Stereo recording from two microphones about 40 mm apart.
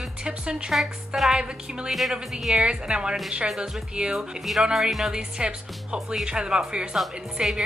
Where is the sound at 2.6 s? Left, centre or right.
Right.